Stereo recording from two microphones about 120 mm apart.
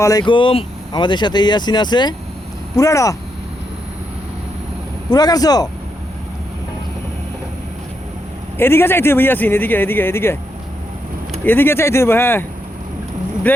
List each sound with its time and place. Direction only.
0.0 s a man's voice: 30° left (ahead or behind)
0.3 s speech: 45° left (ahead or behind)
2.7 s a man's voice: 25° left (ahead or behind)
5.1 s speech: 30° left (ahead or behind)
8.5 s a man's voice: 20° left (ahead or behind)
11.4 s a man's voice: 15° left (ahead or behind)